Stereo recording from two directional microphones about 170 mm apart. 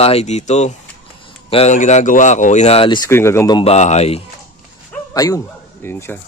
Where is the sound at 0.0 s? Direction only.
40° left (ahead or behind).